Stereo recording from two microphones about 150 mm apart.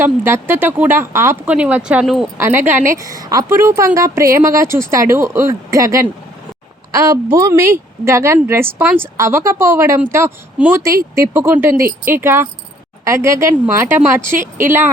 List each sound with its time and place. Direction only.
0.0 s speech: 15° right (ahead or behind)
2.4 s speech: 15° right (ahead or behind)